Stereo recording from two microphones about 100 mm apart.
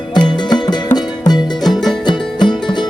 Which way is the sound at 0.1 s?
45° left (ahead or behind).